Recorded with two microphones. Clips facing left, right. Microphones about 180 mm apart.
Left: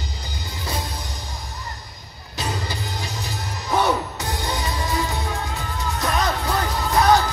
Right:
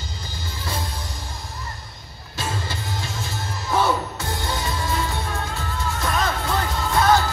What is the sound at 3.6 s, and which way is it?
Music, 20° left (ahead or behind).